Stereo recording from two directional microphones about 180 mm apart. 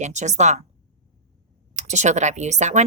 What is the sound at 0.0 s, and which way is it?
Speech, 40° right (ahead or behind).